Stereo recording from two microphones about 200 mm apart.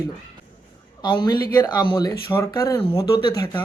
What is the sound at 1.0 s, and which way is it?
Speech, 20° left (ahead or behind).